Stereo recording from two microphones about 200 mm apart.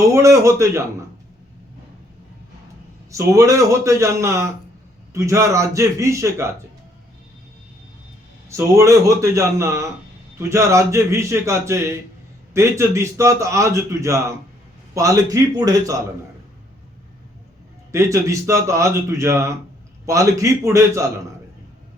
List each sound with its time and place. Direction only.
0.0 s a man's voice: 15° right (ahead or behind)
3.1 s a man's voice: 15° right (ahead or behind)
8.4 s a man's voice: 15° right (ahead or behind)
17.9 s a man's voice: 15° right (ahead or behind)